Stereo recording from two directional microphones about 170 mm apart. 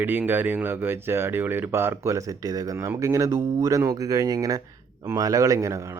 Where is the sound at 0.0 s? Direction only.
10° right (ahead or behind).